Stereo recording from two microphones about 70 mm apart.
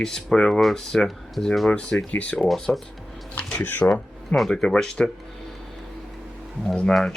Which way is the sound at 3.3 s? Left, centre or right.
Left.